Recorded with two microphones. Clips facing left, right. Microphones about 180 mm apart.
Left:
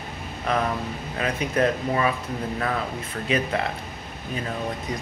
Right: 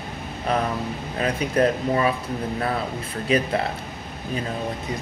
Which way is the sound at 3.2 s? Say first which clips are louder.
Right 3 dB; 35° right (ahead or behind).